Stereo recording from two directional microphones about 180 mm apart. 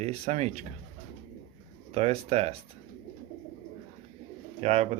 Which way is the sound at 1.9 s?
35° right (ahead or behind).